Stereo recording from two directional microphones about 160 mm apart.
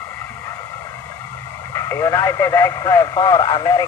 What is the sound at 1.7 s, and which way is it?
Speech, 15° left (ahead or behind).